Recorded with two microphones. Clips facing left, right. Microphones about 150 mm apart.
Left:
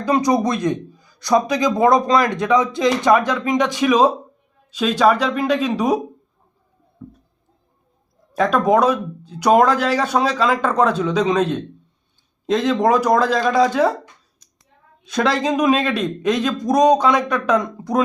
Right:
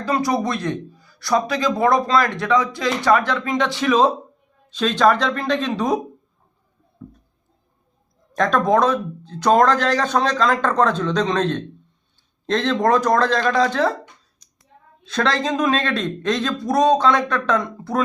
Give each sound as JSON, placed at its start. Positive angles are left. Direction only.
{"t": 0.0, "sound": "a man's voice", "side_deg": 20}
{"t": 8.3, "sound": "a man's voice", "side_deg": 10}
{"t": 15.0, "sound": "a man's voice", "side_deg": 10}